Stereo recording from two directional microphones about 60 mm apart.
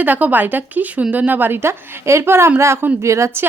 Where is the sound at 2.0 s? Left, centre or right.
Right.